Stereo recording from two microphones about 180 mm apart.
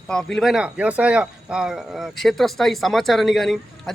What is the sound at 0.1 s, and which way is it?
Speech, 5° left (ahead or behind).